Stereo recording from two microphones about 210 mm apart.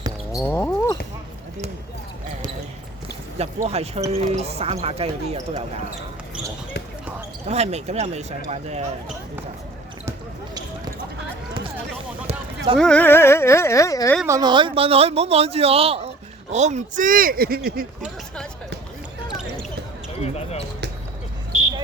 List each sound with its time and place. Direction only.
0.3 s a sound: 10° left (ahead or behind)
3.3 s a man's voice: 30° right (ahead or behind)
7.4 s speech: 30° right (ahead or behind)
12.3 s a sound: 30° right (ahead or behind)
12.7 s speech: 5° left (ahead or behind)
14.3 s a man's voice: 20° right (ahead or behind); by 17.8 s 45° right (ahead or behind)
20.2 s speech: 30° left (ahead or behind)